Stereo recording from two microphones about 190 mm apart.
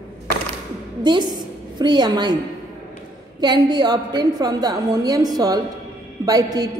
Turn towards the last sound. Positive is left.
turn(degrees=-20)  # may be behind; listen again after turning